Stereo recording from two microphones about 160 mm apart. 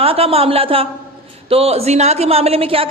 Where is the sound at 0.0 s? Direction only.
35° right (ahead or behind).